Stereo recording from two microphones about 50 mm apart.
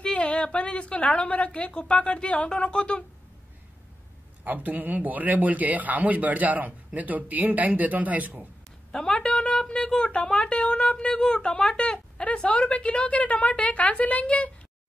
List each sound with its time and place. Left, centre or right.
0.0 s a woman's voice: left
4.5 s a man's voice: right
8.9 s a woman's voice: centre